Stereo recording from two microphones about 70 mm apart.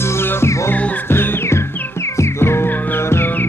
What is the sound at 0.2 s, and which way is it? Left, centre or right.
Music, left.